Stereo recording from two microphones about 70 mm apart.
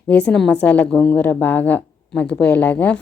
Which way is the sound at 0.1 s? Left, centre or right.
Centre.